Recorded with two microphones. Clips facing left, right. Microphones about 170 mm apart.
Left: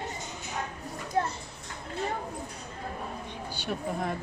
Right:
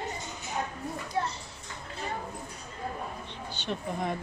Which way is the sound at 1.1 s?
45° left (ahead or behind).